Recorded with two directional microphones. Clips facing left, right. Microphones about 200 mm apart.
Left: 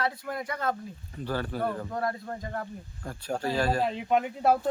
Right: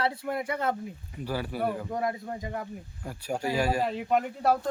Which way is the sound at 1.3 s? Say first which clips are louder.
Even; 10° right (ahead or behind).